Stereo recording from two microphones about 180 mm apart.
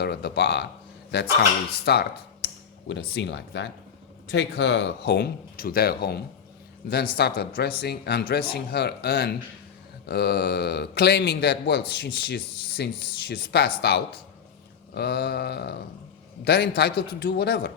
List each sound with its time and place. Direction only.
0.0 s speech: 70° left (ahead or behind)